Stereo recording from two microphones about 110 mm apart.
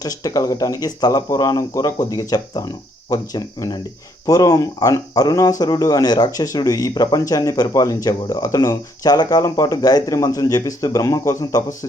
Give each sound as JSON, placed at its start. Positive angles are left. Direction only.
{"t": 0.0, "sound": "speech", "side_deg": 35}